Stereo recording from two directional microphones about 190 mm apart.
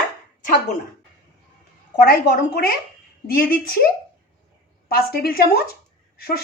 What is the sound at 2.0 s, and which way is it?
Speech, 50° left (ahead or behind).